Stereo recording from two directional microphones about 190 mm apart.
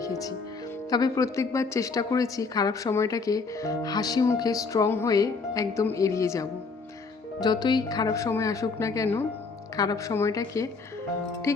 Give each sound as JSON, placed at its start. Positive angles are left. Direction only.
{"t": 0.0, "sound": "a woman's voice", "side_deg": 15}